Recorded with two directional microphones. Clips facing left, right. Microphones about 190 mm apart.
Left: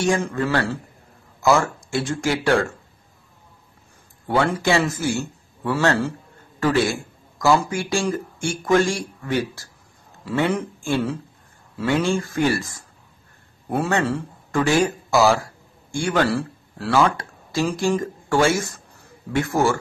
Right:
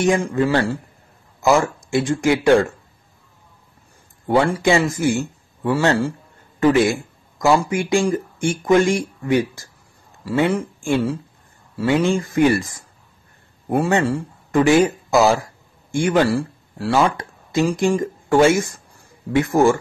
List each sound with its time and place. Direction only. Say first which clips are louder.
0.0 s speech: right 4 dB; 20° right (ahead or behind)
4.6 s a man's voice: right 3 dB; 15° right (ahead or behind)